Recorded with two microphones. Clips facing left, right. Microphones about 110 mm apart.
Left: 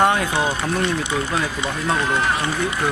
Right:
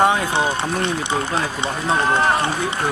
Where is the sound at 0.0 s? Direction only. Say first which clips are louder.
Right 1 dB; centre (ahead or behind).